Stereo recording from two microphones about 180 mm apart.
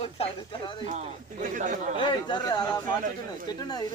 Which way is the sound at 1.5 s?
45° right (ahead or behind).